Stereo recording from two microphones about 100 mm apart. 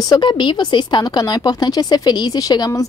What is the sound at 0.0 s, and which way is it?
A woman's voice, 45° left (ahead or behind).